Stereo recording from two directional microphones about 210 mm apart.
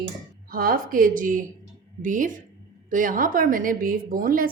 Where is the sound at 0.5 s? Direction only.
45° right (ahead or behind).